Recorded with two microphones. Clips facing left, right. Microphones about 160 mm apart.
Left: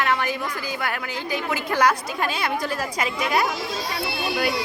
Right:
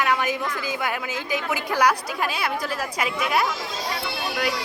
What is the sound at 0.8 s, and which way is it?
A woman's voice, 15° right (ahead or behind).